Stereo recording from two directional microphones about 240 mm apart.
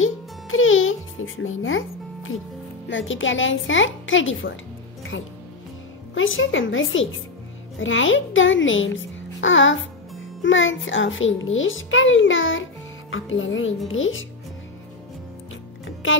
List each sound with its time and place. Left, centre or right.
0.0 s music: left
2.9 s a child's voice: left
16.0 s a child's voice: left